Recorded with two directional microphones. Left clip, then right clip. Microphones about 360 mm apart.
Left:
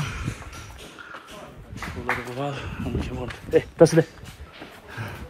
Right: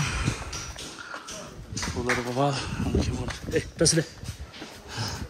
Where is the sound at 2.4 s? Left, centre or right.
Centre.